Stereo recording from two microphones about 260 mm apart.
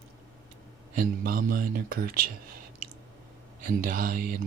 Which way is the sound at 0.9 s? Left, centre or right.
Right.